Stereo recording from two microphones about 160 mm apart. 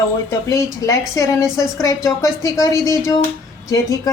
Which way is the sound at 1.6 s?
20° left (ahead or behind).